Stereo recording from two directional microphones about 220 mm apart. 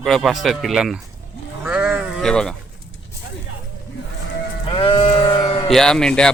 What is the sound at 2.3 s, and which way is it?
Speech, 5° left (ahead or behind).